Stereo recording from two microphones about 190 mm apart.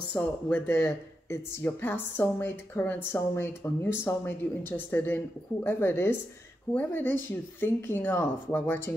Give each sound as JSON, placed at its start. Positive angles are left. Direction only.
{"t": 0.1, "sound": "speech", "side_deg": 10}